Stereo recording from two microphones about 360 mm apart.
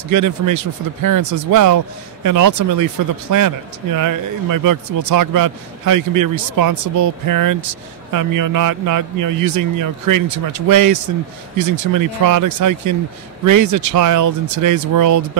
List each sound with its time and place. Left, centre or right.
0.1 s speech: right